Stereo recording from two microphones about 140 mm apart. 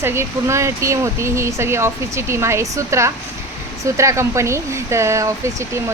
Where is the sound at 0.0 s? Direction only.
15° right (ahead or behind).